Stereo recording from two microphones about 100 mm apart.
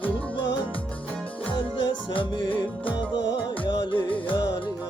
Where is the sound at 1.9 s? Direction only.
55° left (ahead or behind).